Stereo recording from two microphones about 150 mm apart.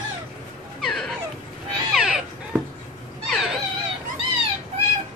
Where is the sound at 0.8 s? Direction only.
Centre (ahead or behind).